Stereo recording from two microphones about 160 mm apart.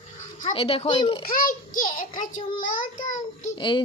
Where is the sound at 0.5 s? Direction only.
35° left (ahead or behind).